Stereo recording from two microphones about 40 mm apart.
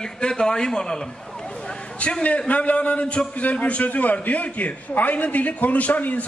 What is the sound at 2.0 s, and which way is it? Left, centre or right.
A man's voice, left.